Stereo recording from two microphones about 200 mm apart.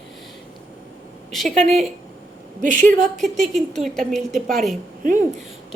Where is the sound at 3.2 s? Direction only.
Centre (ahead or behind).